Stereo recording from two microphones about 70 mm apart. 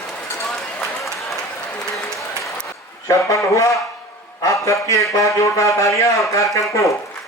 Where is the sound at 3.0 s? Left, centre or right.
Left.